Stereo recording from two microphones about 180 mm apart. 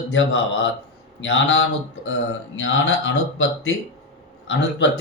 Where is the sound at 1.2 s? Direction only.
90° left.